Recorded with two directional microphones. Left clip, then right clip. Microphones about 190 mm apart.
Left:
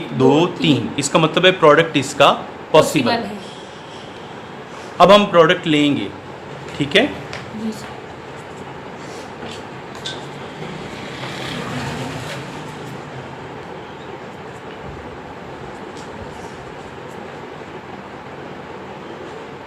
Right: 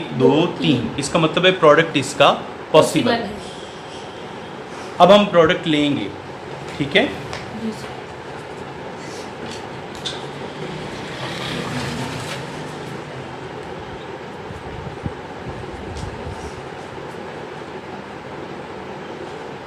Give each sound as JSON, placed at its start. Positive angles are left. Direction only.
{"t": 0.2, "sound": "speech", "side_deg": 40}
{"t": 4.9, "sound": "speech", "side_deg": 35}